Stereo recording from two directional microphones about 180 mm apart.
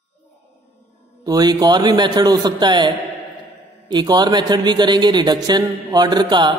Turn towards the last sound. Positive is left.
turn(degrees=-25)  # may be behind; listen again after turning